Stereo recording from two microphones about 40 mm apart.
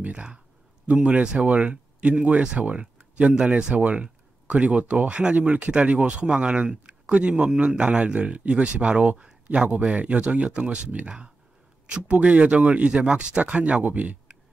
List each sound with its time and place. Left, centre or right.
0.0 s speech: right